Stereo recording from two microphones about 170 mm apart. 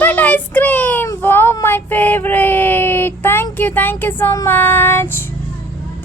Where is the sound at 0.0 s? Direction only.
10° left (ahead or behind).